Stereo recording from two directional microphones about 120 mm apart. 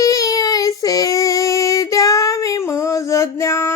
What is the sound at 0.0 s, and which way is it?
Child singing, 30° left (ahead or behind).